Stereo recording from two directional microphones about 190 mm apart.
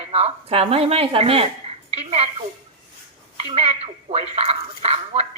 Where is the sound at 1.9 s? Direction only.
35° right (ahead or behind).